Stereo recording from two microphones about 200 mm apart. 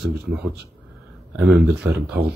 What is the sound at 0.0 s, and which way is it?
Speech, 50° right (ahead or behind).